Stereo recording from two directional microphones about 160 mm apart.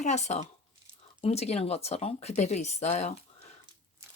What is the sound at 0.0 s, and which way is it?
Speech, 45° left (ahead or behind).